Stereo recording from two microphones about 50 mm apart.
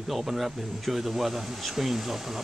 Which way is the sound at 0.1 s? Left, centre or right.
Centre.